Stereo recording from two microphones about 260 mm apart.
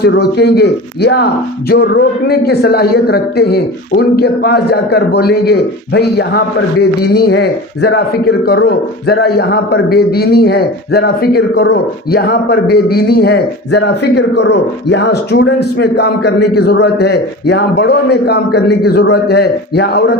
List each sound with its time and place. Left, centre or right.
0.0 s a man's voice: left